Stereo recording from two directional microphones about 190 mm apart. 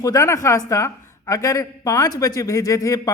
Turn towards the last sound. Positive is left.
turn(degrees=15)  # may be behind; listen again after turning